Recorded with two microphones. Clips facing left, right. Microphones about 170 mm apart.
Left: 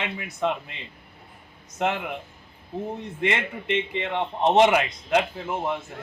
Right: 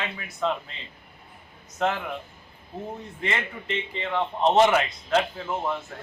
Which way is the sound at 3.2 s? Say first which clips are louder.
Left 4 dB; 20° left (ahead or behind).